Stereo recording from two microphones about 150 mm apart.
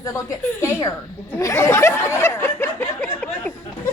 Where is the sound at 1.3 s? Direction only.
20° left (ahead or behind).